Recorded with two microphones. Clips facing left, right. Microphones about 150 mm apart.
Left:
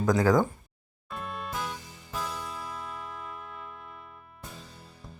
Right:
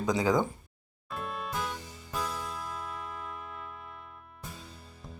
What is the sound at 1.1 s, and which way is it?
Music, centre (ahead or behind).